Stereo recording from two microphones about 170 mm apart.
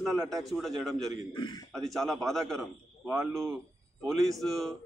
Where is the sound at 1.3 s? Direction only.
25° left (ahead or behind).